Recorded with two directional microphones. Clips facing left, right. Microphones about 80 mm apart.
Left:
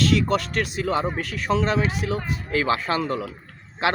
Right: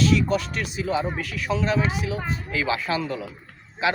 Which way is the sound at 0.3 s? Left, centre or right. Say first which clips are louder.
Left 3 dB; left.